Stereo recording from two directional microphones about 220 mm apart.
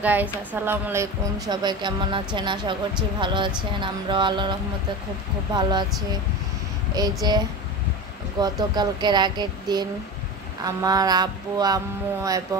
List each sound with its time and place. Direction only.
0.0 s a woman's voice: 5° right (ahead or behind)
6.9 s a woman's voice: 15° right (ahead or behind)